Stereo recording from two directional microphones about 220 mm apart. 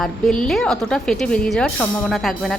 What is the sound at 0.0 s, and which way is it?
A woman's voice, centre (ahead or behind).